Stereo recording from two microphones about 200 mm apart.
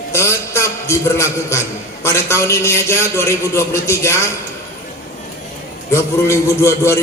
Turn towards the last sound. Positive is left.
turn(degrees=15)  # may be behind; listen again after turning